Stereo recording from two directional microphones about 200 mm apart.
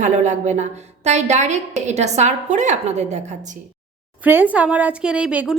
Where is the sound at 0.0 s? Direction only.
35° right (ahead or behind).